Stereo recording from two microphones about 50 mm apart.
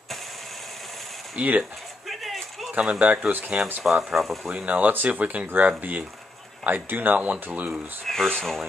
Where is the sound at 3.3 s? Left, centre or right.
Right.